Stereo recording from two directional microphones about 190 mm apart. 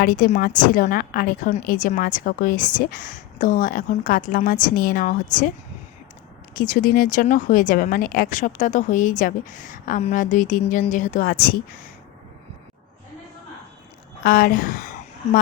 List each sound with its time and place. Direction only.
0.0 s speech: 50° left (ahead or behind)
6.6 s speech: 45° left (ahead or behind)
14.3 s a woman's voice: 45° left (ahead or behind)